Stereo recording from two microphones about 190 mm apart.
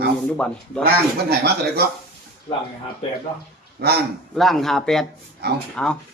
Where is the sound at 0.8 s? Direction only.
60° right (ahead or behind).